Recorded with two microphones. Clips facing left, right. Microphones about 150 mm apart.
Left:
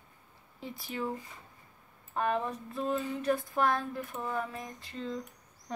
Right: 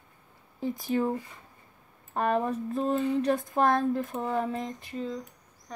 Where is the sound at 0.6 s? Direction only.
45° right (ahead or behind).